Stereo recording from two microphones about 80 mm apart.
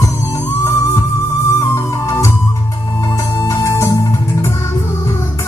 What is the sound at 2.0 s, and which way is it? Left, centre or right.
Music, left.